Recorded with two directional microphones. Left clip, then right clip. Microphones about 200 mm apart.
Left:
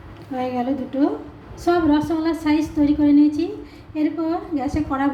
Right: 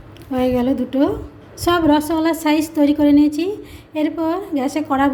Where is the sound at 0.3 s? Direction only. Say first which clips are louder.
Right 6 dB; 50° right (ahead or behind).